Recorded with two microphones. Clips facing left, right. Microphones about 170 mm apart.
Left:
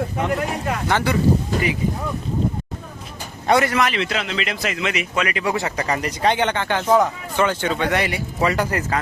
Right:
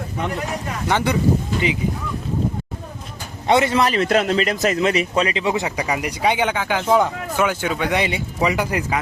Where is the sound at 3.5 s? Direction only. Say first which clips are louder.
Right 1 dB; 25° right (ahead or behind).